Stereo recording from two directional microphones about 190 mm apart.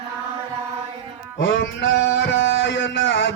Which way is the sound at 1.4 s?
75° left (ahead or behind).